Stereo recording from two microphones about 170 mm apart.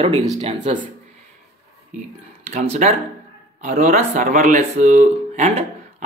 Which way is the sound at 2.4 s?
40° right (ahead or behind).